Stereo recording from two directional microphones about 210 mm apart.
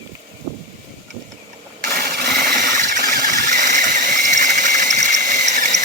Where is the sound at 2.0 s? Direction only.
45° right (ahead or behind).